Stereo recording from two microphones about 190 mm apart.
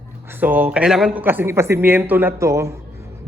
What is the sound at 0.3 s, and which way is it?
A man's voice, 10° right (ahead or behind).